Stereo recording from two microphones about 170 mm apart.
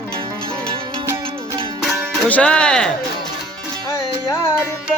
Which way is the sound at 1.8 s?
Centre (ahead or behind).